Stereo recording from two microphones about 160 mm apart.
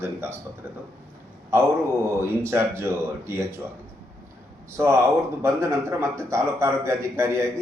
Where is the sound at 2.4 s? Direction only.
15° right (ahead or behind).